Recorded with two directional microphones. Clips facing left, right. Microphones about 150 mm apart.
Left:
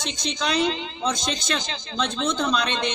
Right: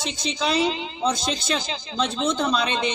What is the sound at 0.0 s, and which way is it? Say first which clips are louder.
A woman's voice: right 2 dB; 5° right (ahead or behind).